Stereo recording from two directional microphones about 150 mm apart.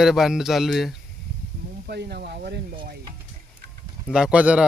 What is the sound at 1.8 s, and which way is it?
Speech, 90° right.